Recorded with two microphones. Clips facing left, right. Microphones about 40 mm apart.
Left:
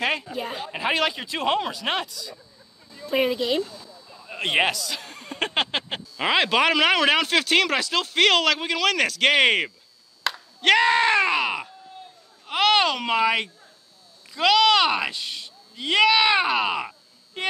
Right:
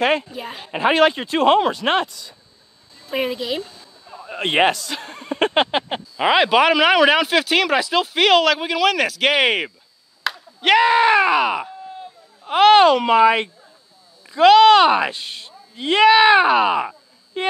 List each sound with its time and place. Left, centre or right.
0.0 s speech: right
0.3 s speech: centre
0.7 s speech: right
3.1 s speech: centre
4.3 s a man's voice: right
12.4 s speech: centre